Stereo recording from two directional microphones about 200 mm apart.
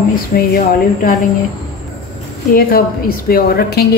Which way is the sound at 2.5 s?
45° left (ahead or behind).